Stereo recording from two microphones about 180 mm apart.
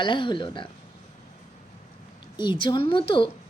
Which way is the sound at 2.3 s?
25° left (ahead or behind).